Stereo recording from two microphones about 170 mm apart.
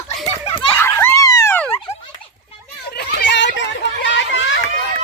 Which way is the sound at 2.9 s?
80° left.